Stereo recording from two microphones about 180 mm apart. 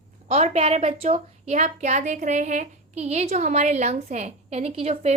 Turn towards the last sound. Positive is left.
turn(degrees=-35)  # may be behind; listen again after turning